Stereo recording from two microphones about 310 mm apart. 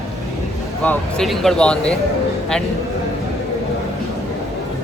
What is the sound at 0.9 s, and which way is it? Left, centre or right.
Speech, centre.